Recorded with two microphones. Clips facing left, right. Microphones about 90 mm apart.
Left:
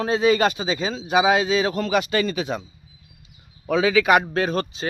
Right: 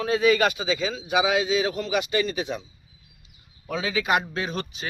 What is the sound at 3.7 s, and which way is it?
Speech, 80° left.